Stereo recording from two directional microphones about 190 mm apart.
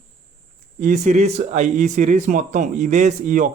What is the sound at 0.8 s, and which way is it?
Speech, 45° right (ahead or behind).